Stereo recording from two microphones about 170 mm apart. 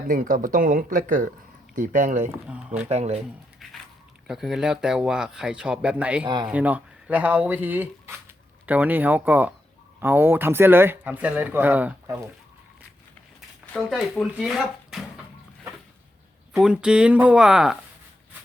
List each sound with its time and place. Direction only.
0.1 s speech: 50° right (ahead or behind)
2.5 s speech: 5° right (ahead or behind)
2.9 s speech: 40° right (ahead or behind)
3.6 s biting: centre (ahead or behind)
4.3 s speech: centre (ahead or behind)
6.2 s speech: 25° right (ahead or behind)
6.5 s speech: 10° right (ahead or behind)
13.9 s speech: centre (ahead or behind)
16.5 s speech: 5° right (ahead or behind)